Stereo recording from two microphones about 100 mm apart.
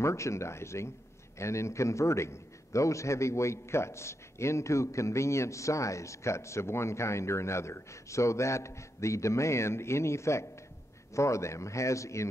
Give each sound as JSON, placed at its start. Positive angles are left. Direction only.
{"t": 0.0, "sound": "a man's voice", "side_deg": 30}